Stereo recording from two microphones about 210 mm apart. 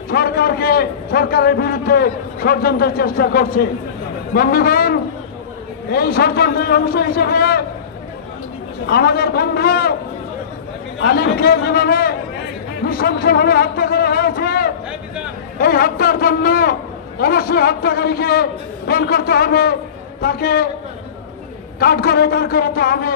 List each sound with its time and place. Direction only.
0.1 s a man's voice: 50° left (ahead or behind)
8.8 s a man's voice: 45° left (ahead or behind)
11.0 s a man's voice: 50° left (ahead or behind)
21.7 s a man's voice: 45° left (ahead or behind)